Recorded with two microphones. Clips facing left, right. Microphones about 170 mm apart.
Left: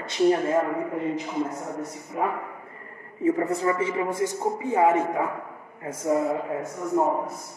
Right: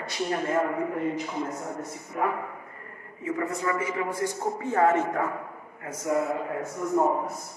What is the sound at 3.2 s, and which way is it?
A man's voice, 35° left (ahead or behind).